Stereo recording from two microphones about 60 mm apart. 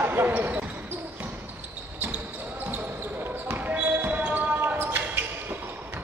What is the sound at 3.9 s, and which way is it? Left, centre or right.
Basketball bounce, right.